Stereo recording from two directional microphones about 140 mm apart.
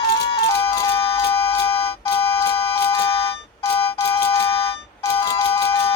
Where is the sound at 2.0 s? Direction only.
20° left (ahead or behind).